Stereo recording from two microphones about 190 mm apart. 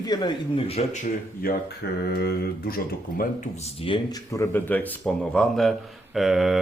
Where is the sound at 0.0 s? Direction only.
20° left (ahead or behind).